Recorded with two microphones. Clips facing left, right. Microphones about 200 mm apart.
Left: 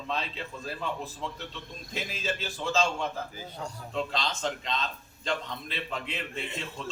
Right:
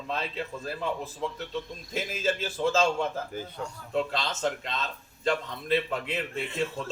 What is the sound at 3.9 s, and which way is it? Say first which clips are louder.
A man's voice: right 3 dB; 55° right (ahead or behind).